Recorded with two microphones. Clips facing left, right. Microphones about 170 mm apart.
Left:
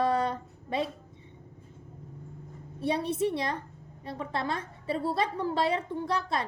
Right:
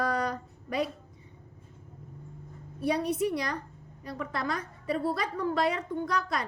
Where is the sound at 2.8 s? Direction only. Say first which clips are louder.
Even; 25° left (ahead or behind).